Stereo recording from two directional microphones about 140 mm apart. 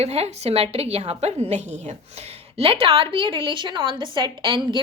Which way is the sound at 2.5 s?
40° right (ahead or behind).